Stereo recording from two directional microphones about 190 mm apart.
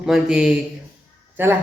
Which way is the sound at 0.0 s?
5° right (ahead or behind).